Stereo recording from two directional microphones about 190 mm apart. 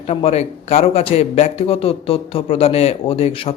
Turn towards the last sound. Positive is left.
turn(degrees=30)  # may be behind; listen again after turning